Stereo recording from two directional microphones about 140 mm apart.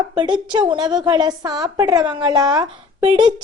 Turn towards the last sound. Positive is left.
turn(degrees=-35)  # may be behind; listen again after turning